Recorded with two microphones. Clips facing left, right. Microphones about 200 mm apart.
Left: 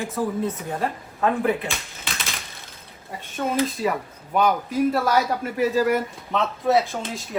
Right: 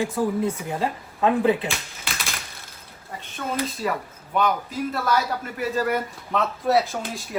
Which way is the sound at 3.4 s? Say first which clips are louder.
Left 3 dB; centre (ahead or behind).